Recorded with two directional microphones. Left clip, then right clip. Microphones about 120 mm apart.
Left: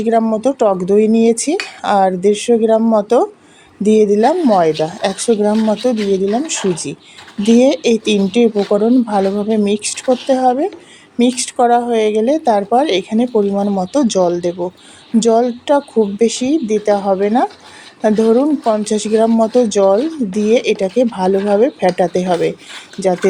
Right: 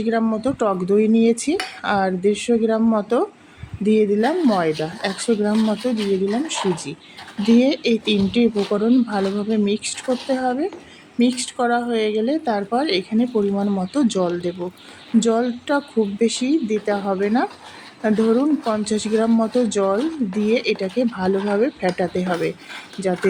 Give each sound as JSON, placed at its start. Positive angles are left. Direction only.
{"t": 0.0, "sound": "speech", "side_deg": 40}